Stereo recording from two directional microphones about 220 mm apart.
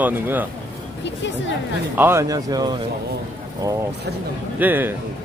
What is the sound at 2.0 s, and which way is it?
Speech, 10° right (ahead or behind).